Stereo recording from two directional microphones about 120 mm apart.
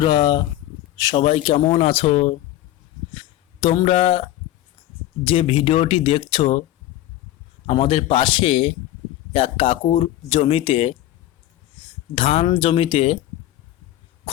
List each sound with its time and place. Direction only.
0.0 s speech: 35° left (ahead or behind)
1.1 s speech: 55° left (ahead or behind)
3.8 s speech: 55° left (ahead or behind)
7.7 s speech: 50° left (ahead or behind)
11.8 s a sound: 50° left (ahead or behind)
12.5 s speech: 45° left (ahead or behind)